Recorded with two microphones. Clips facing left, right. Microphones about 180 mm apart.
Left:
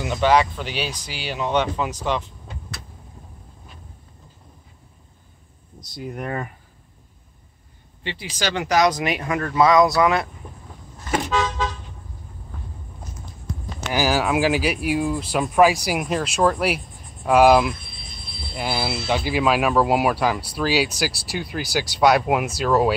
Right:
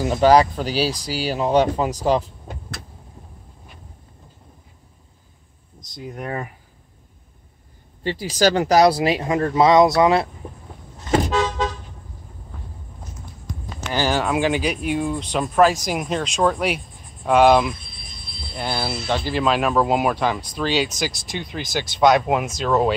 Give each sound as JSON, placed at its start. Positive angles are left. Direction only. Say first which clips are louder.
{"t": 0.0, "sound": "speech", "louder": "right 4 dB", "side_deg": -35}
{"t": 5.8, "sound": "speech", "louder": "left 1 dB", "side_deg": 5}
{"t": 8.0, "sound": "speech", "louder": "right 8 dB", "side_deg": -40}
{"t": 11.2, "sound": "toot", "louder": "right 2 dB", "side_deg": -40}
{"t": 13.9, "sound": "speech", "louder": "even", "side_deg": 5}